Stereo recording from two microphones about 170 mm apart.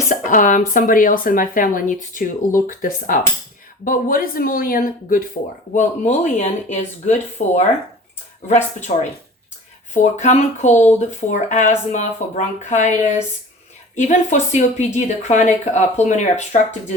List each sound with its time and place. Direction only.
0.1 s a woman's voice: 50° left (ahead or behind)
5.7 s a woman's voice: 45° left (ahead or behind)
9.9 s a woman's voice: 45° left (ahead or behind)